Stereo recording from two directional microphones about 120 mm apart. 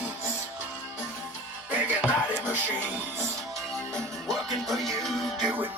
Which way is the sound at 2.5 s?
15° right (ahead or behind).